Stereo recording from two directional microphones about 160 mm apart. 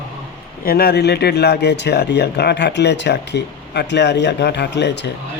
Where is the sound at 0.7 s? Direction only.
75° left (ahead or behind).